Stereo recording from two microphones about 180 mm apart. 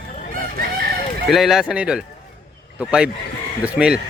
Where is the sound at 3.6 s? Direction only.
5° right (ahead or behind).